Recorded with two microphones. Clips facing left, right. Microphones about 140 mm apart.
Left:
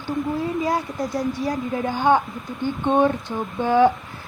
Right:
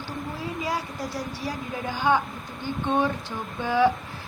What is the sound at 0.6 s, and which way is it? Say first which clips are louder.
A woman's voice: left 6 dB; 50° left (ahead or behind).